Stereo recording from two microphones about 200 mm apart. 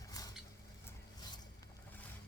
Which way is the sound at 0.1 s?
20° left (ahead or behind).